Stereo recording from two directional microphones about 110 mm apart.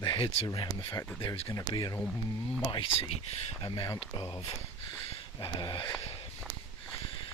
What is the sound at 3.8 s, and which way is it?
Speech, 35° left (ahead or behind).